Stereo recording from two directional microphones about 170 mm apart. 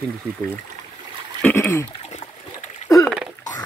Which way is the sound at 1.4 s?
15° left (ahead or behind).